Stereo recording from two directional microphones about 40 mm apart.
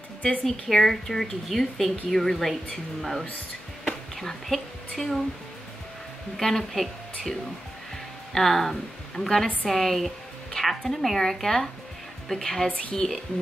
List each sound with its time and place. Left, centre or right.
0.2 s speech: left
0.5 s speech: centre
3.8 s a sound: centre
6.3 s speech: centre
8.4 s speech: centre